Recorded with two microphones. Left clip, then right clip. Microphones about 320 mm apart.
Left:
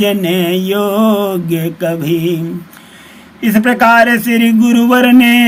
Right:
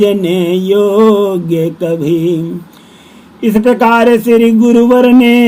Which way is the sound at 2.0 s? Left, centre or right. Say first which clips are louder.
Right 3 dB; centre.